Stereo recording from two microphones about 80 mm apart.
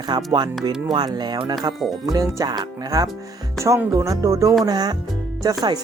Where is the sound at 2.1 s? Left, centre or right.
Right.